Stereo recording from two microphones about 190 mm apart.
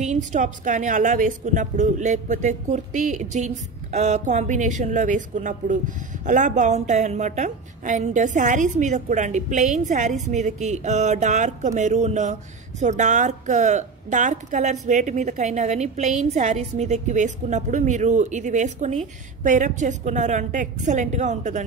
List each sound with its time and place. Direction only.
0.0 s a woman's voice: 40° right (ahead or behind)